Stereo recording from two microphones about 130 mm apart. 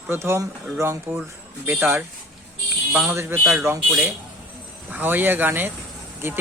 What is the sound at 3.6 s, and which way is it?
Speech, 15° right (ahead or behind).